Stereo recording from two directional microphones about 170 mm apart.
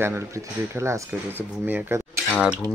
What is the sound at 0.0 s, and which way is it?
Speech, 15° right (ahead or behind).